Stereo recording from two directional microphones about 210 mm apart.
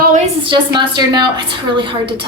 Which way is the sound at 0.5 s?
20° right (ahead or behind).